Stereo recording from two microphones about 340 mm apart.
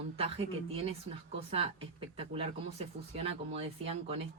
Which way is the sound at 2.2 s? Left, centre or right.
Centre.